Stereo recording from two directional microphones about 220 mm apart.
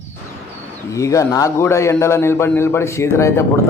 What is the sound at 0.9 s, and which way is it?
A man's voice, 15° left (ahead or behind).